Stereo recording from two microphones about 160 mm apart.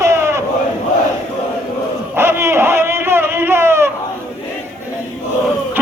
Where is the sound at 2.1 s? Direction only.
15° right (ahead or behind).